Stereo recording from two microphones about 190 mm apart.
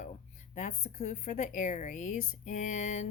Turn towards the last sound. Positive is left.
turn(degrees=40)  # may be behind; listen again after turning